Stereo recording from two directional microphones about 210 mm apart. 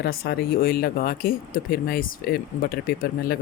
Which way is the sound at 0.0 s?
50° left (ahead or behind).